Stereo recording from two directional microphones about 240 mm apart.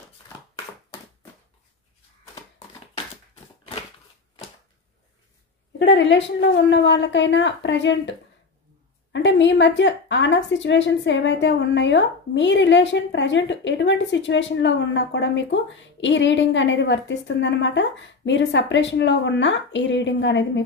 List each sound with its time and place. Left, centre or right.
5.8 s a woman's voice: left